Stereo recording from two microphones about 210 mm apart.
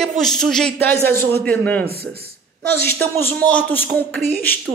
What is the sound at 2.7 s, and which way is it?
Speech, 10° left (ahead or behind).